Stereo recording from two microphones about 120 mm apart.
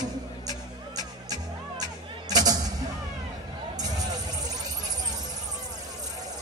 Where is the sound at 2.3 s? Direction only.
30° right (ahead or behind).